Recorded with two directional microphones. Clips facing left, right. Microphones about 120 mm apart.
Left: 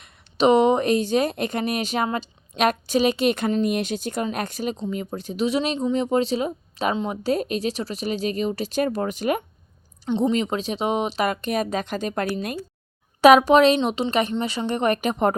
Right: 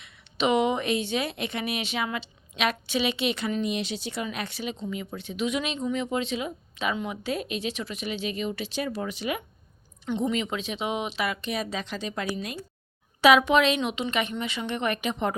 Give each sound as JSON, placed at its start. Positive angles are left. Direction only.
{"t": 0.0, "sound": "speech", "side_deg": 35}